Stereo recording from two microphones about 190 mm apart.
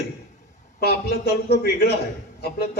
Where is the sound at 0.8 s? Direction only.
55° left (ahead or behind).